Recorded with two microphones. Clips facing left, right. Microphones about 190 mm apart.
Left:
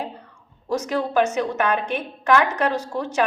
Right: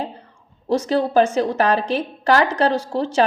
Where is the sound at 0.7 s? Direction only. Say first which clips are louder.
Right 5 dB; 30° right (ahead or behind).